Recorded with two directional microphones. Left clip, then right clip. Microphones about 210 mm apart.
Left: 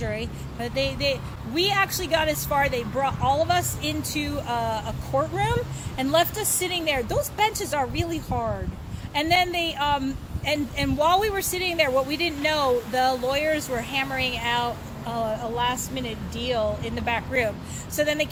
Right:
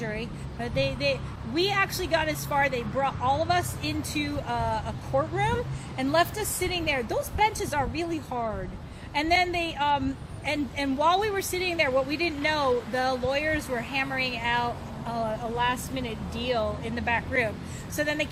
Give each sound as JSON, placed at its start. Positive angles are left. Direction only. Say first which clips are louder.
{"t": 0.0, "sound": "a woman's voice", "louder": "left 3 dB", "side_deg": 20}